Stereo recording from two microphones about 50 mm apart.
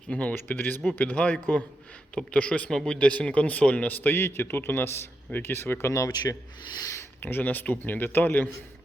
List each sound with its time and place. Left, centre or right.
0.1 s speech: left
4.1 s a man's voice: left
7.2 s speech: left